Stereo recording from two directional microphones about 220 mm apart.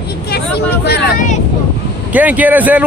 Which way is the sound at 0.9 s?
45° left (ahead or behind).